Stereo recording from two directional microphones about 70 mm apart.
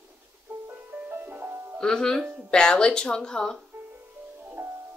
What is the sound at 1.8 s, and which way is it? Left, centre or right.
Speech, centre.